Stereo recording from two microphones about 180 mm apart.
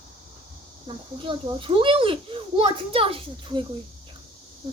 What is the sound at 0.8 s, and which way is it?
A child's voice, 30° right (ahead or behind).